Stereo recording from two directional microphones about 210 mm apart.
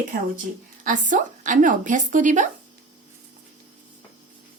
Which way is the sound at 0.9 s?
35° right (ahead or behind).